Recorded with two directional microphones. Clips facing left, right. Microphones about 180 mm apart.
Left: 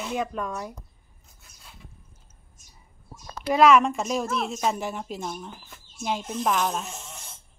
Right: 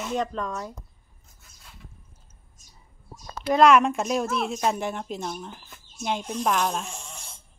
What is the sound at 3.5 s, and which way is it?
A woman's voice, centre (ahead or behind).